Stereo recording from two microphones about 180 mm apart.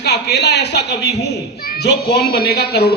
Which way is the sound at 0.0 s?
70° left (ahead or behind).